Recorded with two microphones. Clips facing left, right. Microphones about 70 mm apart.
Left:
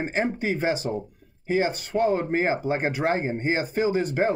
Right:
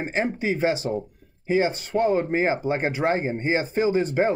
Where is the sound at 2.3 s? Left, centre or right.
Centre.